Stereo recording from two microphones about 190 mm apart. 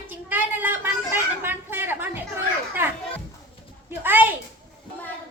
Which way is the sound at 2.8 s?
10° right (ahead or behind).